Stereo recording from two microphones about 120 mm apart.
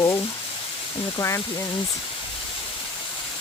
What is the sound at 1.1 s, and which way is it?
Speech, 25° left (ahead or behind).